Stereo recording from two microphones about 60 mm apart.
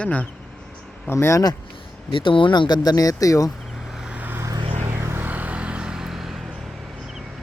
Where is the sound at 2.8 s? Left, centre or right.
Left.